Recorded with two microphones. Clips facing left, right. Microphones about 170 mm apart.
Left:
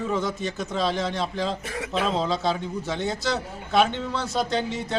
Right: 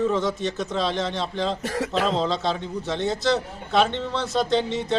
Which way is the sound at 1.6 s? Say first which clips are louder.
Right 6 dB; 40° right (ahead or behind).